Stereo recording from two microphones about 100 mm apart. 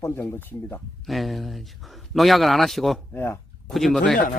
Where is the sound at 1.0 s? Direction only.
Centre (ahead or behind).